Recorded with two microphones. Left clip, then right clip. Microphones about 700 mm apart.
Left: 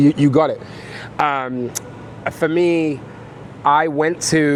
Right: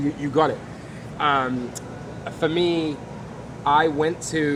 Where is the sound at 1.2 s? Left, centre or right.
Left.